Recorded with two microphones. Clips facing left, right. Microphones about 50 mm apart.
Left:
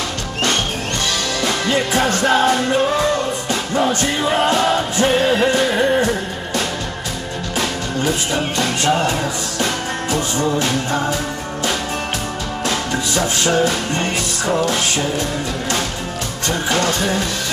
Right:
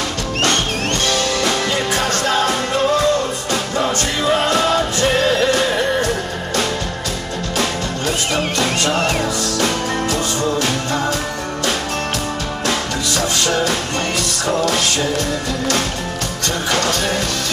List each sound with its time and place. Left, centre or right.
1.4 s music: left
4.5 s music: left
10.1 s music: centre
13.1 s music: left
16.4 s music: left